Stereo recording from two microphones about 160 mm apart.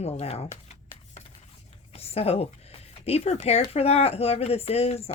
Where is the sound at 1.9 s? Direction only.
40° left (ahead or behind).